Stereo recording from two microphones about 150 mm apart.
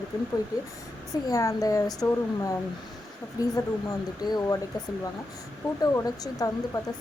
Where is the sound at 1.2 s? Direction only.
20° left (ahead or behind).